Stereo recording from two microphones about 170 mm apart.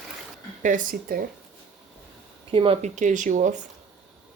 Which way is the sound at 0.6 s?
50° right (ahead or behind).